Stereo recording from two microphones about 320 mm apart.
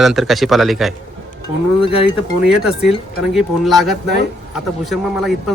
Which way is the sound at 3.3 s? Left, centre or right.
Centre.